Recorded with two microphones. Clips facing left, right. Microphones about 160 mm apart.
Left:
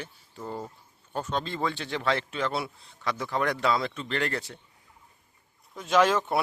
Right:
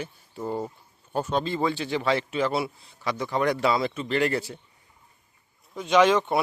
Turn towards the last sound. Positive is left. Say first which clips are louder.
# right 3 dB
turn(degrees=0)  # may be behind; listen again after turning